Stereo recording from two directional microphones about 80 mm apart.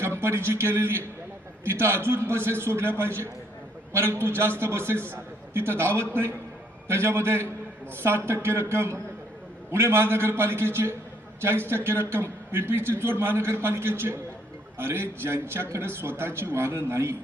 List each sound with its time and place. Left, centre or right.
0.0 s a man's voice: right